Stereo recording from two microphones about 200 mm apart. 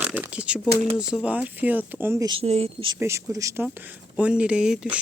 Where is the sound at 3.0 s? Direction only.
15° right (ahead or behind).